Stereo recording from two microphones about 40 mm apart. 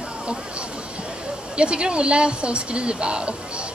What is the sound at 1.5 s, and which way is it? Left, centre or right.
Speech, right.